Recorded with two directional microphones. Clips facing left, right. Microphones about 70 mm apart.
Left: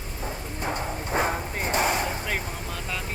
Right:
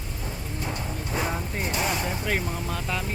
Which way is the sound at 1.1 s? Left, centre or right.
Left.